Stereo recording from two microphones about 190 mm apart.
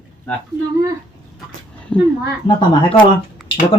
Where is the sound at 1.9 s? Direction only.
5° left (ahead or behind).